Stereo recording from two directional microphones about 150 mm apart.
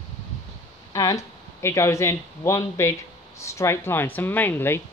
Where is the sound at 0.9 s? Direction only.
25° left (ahead or behind).